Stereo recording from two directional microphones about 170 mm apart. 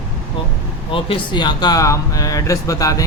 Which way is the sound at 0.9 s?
30° left (ahead or behind).